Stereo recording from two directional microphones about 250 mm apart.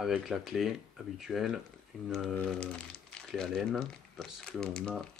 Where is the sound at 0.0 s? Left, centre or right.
Centre.